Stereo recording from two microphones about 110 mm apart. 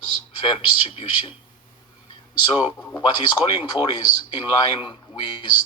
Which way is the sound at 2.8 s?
20° left (ahead or behind).